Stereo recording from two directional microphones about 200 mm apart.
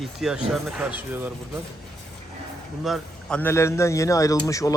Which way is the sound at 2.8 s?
Centre (ahead or behind).